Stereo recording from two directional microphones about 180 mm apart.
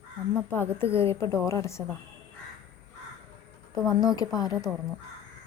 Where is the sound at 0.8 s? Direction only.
15° left (ahead or behind).